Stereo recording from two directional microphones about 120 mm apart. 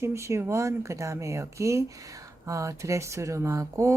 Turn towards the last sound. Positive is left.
turn(degrees=-25)  # may be behind; listen again after turning